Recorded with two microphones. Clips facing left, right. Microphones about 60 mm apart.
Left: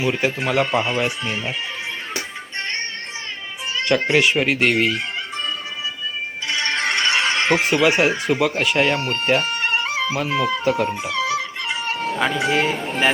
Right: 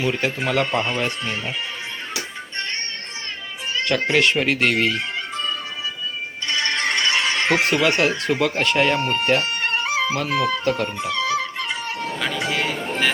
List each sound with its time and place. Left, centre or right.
0.0 s speech: centre
3.8 s speech: centre
6.7 s music: left
7.4 s speech: centre
9.2 s music: centre
10.2 s speech: centre
11.0 s music: centre
11.9 s cat: left
12.4 s speech: left